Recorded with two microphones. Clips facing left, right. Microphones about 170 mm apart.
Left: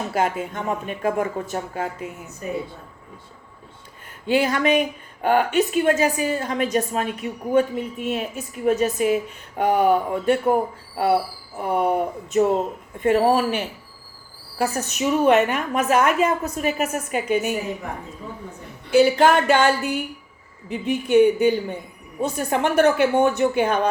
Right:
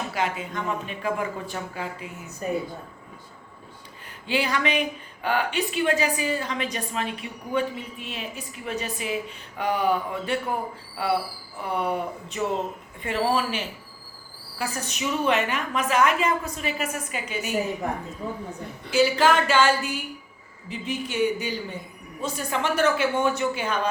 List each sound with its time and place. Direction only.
0.1 s speech: 50° left (ahead or behind)
4.3 s speech: 50° left (ahead or behind)
18.9 s speech: 55° left (ahead or behind)